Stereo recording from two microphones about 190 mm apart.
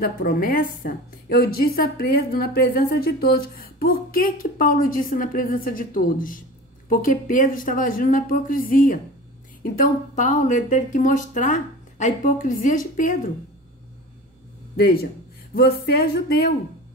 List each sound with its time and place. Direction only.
0.0 s a woman's voice: 50° left (ahead or behind)
14.8 s a woman's voice: 55° left (ahead or behind)